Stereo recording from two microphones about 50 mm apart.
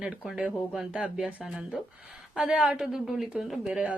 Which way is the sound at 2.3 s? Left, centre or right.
Centre.